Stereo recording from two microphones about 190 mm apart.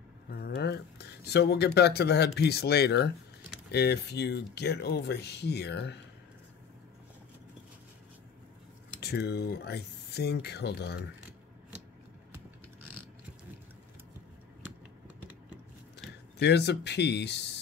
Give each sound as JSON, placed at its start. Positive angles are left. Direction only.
{"t": 0.3, "sound": "speech", "side_deg": 55}
{"t": 9.0, "sound": "speech", "side_deg": 60}
{"t": 16.3, "sound": "speech", "side_deg": 65}